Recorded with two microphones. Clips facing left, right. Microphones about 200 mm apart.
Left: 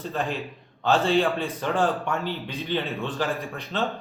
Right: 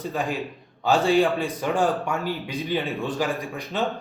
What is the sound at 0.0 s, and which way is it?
A man's voice, 10° right (ahead or behind).